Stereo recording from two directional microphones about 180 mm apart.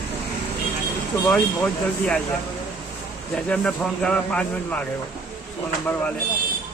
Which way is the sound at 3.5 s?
5° left (ahead or behind).